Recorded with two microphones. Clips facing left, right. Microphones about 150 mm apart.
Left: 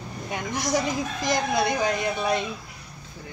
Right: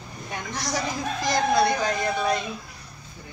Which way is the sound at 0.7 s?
20° left (ahead or behind).